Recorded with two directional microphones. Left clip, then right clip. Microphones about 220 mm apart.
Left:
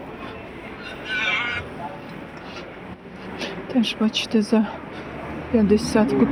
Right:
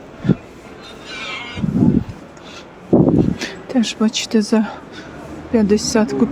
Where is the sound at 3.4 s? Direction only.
25° right (ahead or behind).